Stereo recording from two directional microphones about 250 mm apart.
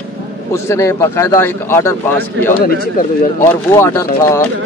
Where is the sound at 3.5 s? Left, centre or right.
Centre.